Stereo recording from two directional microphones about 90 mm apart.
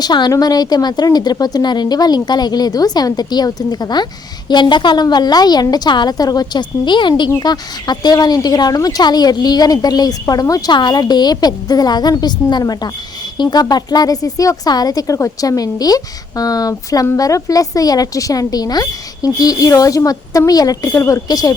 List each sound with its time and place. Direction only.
0.0 s a woman's voice: 50° left (ahead or behind)
7.3 s a woman's voice: 45° left (ahead or behind)
10.7 s a woman's voice: 55° left (ahead or behind)